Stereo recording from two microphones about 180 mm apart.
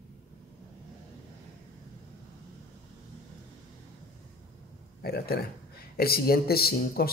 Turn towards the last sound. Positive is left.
turn(degrees=60)  # may be behind; listen again after turning